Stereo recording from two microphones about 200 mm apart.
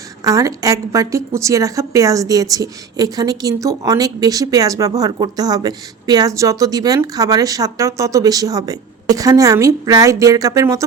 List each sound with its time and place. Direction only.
0.3 s a woman's voice: 15° right (ahead or behind)